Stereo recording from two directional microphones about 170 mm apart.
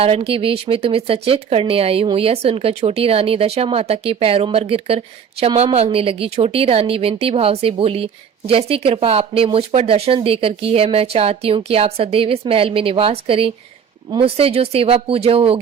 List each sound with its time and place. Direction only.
0.0 s a woman's voice: 35° right (ahead or behind)